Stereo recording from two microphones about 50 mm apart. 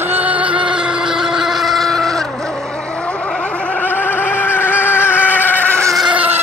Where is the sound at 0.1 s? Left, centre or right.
Right; by 2.2 s centre.